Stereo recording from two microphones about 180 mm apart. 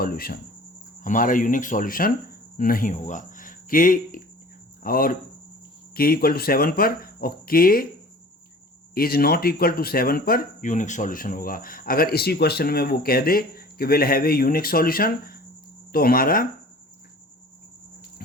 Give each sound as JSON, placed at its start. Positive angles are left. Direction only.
{"t": 0.0, "sound": "speech", "side_deg": 55}
{"t": 9.0, "sound": "speech", "side_deg": 55}